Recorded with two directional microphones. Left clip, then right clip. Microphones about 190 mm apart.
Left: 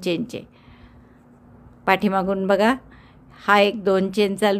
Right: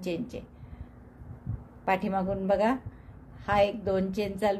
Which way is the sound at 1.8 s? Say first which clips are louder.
Left 8 dB; 40° left (ahead or behind).